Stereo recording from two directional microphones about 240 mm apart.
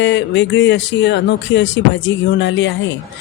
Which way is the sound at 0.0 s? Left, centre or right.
Left.